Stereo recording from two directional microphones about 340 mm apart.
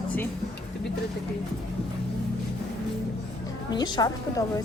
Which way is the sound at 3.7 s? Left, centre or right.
Centre.